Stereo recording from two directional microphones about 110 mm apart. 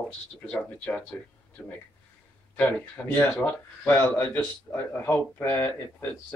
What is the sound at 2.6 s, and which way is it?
A man's voice, 10° left (ahead or behind).